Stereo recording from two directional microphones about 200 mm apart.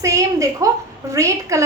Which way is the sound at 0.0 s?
15° right (ahead or behind).